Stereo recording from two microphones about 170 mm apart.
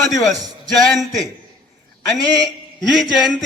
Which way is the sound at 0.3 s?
20° right (ahead or behind).